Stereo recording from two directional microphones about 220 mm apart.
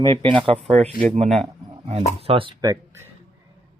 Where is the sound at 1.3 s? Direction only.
20° right (ahead or behind).